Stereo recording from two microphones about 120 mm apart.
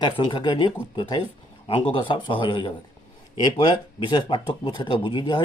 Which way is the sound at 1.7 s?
45° left (ahead or behind).